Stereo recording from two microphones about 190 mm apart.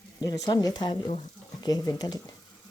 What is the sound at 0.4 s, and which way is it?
Speech, 20° left (ahead or behind).